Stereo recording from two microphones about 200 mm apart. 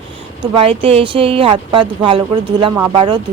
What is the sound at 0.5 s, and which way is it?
Speech, 30° right (ahead or behind).